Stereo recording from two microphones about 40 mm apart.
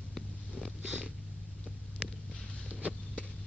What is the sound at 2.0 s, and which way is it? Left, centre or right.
Vehicle, right.